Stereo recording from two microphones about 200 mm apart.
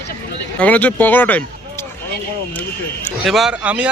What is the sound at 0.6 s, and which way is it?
Speech, 5° left (ahead or behind).